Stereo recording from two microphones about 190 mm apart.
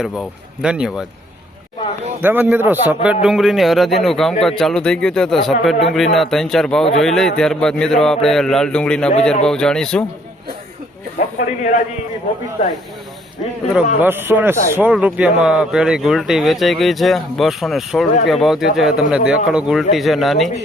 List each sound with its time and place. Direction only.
0.0 s speech: 5° right (ahead or behind)
2.2 s speech: 10° right (ahead or behind)
11.3 s a man's voice: 45° left (ahead or behind)
13.7 s speech: 10° right (ahead or behind)